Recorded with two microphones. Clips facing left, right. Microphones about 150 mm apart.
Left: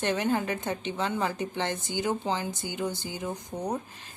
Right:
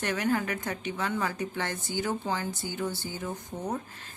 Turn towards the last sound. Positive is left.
turn(degrees=15)  # may be behind; listen again after turning